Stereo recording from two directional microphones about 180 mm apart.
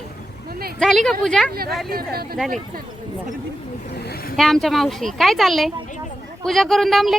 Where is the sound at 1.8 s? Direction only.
60° right (ahead or behind).